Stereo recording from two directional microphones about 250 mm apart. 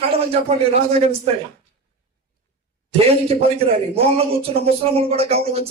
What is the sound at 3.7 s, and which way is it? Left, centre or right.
Speech, right.